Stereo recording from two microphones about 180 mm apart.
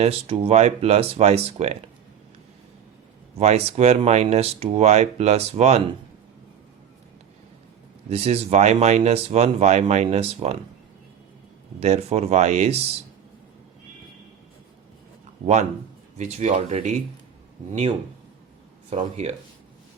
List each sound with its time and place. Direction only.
0.0 s speech: 35° right (ahead or behind)
3.3 s speech: 35° right (ahead or behind)
8.1 s speech: 35° right (ahead or behind)
11.8 s speech: 35° right (ahead or behind)
16.1 s speech: 40° right (ahead or behind)
19.1 s speech: 35° right (ahead or behind)